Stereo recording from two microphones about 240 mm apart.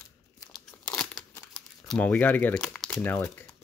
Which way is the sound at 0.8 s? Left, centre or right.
Centre.